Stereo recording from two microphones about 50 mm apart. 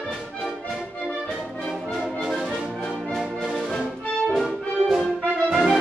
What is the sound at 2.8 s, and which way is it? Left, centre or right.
Brass instrument, centre.